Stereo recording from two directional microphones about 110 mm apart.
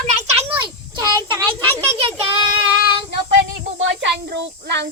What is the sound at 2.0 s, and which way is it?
Child singing, 50° right (ahead or behind).